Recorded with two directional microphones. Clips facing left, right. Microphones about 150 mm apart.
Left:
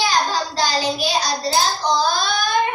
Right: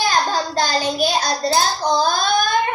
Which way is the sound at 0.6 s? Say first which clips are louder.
Right 1 dB; 50° right (ahead or behind).